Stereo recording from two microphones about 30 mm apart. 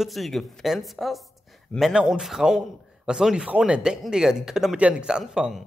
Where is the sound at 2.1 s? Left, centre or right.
Centre.